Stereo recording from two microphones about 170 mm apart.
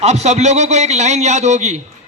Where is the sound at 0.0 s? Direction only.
40° right (ahead or behind).